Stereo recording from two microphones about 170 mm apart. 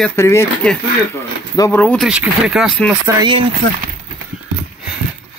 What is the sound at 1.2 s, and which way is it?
Speech, 15° left (ahead or behind).